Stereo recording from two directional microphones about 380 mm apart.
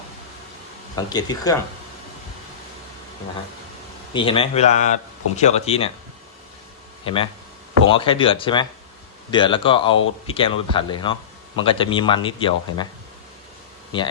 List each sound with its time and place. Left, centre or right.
0.9 s speech: centre
4.1 s speech: centre
7.0 s speech: centre